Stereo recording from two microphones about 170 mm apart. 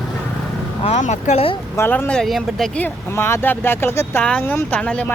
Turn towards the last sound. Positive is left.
turn(degrees=5)  # may be behind; listen again after turning